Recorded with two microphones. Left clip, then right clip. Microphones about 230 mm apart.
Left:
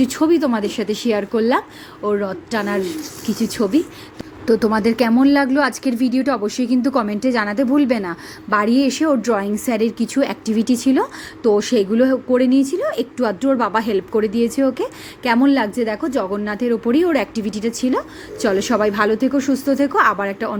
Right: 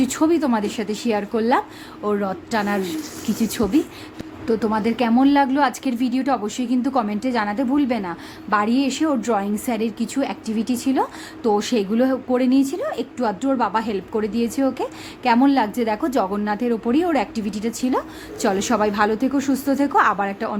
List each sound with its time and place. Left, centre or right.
0.0 s a woman's voice: centre